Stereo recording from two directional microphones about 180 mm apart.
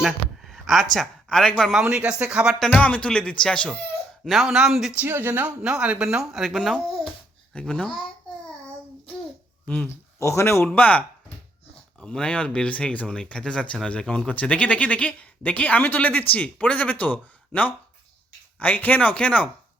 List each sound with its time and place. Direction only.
0.0 s speech: centre (ahead or behind)
2.6 s a man's voice: 10° left (ahead or behind)
9.6 s speech: 10° left (ahead or behind)